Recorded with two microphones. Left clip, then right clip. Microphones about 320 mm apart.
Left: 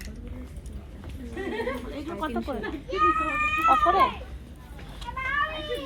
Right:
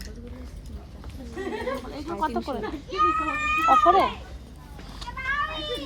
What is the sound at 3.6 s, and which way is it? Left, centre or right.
Speech, right.